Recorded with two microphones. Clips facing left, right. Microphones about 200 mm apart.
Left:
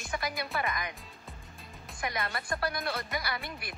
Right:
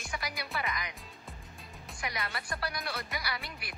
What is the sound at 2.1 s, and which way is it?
Speech, 50° left (ahead or behind).